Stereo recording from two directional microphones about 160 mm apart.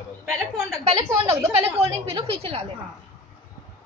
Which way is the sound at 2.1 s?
35° right (ahead or behind).